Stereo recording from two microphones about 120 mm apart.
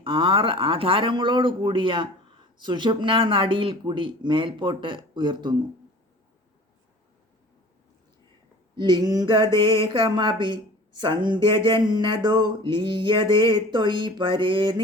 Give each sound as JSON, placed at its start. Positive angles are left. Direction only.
{"t": 0.0, "sound": "speech", "side_deg": -45}
{"t": 2.6, "sound": "mantra", "side_deg": -40}
{"t": 8.7, "sound": "mantra", "side_deg": -35}